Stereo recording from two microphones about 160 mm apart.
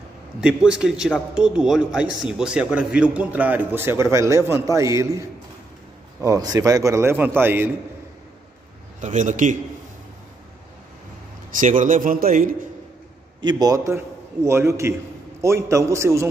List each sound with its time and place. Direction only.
0.4 s a man's voice: 5° right (ahead or behind)
6.2 s a man's voice: 20° right (ahead or behind)
9.0 s a man's voice: 50° right (ahead or behind)
11.6 s speech: 55° right (ahead or behind)
13.4 s a man's voice: 25° right (ahead or behind)